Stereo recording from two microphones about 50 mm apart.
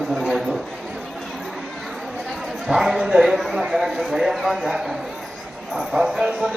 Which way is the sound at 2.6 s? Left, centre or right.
Centre.